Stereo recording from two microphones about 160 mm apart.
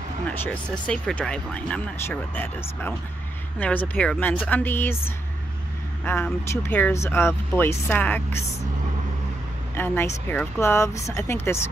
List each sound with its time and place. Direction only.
0.3 s speech: 10° left (ahead or behind)
9.8 s speech: 15° left (ahead or behind)